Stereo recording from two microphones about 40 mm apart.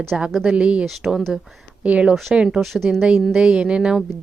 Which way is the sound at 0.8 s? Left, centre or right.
Centre.